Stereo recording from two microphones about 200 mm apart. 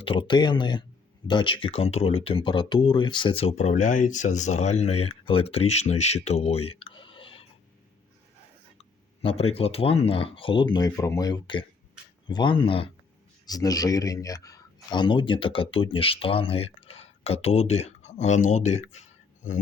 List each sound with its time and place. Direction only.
0.0 s speech: 25° left (ahead or behind)
9.2 s speech: 30° left (ahead or behind)